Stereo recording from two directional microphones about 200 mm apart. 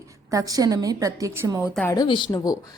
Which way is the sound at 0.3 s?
15° right (ahead or behind).